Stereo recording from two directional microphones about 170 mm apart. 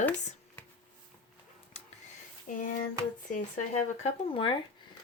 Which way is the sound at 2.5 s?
50° left (ahead or behind).